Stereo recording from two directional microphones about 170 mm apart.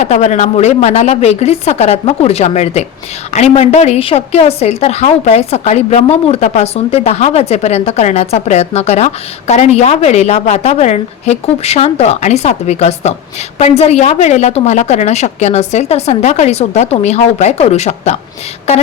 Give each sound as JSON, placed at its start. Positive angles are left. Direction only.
{"t": 0.0, "sound": "a woman's voice", "side_deg": 40}